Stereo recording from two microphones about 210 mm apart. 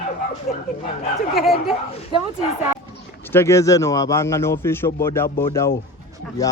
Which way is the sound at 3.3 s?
10° left (ahead or behind).